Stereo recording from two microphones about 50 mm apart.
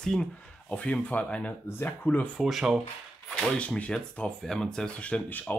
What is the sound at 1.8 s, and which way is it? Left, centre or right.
Speech, left.